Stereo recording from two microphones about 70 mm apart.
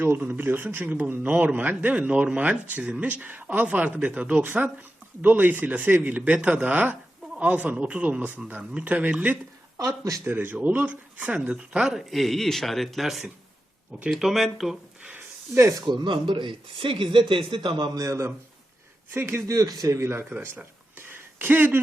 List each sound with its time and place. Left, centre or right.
0.3 s speech: right
9.7 s speech: right
10.2 s speech: right
11.5 s speech: centre
12.1 s speech: centre
15.5 s speech: right
15.9 s a man's voice: right
17.7 s a man's voice: right
18.0 s speech: right
21.1 s a sound: right